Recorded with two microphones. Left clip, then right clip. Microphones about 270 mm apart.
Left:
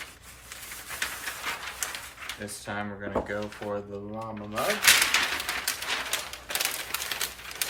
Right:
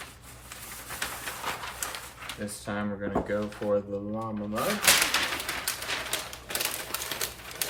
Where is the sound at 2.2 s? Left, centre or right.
Centre.